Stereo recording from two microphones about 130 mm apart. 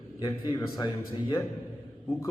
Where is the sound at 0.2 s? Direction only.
30° left (ahead or behind).